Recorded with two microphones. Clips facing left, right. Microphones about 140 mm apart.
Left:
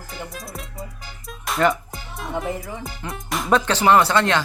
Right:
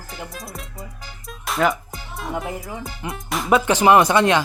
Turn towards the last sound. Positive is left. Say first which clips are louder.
# right 2 dB
turn(degrees=-15)  # may be behind; listen again after turning